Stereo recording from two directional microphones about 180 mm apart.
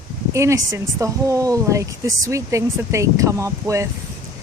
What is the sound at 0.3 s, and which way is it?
Speech, 15° right (ahead or behind).